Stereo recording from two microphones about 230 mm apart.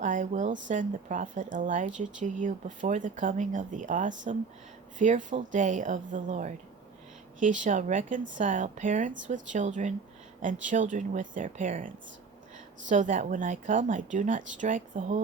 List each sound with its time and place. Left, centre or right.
0.0 s speech: right